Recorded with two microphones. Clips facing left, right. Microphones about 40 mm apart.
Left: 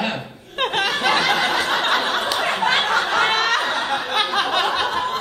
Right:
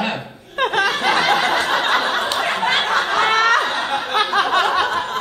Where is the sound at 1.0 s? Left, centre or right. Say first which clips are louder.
Right 1 dB; right.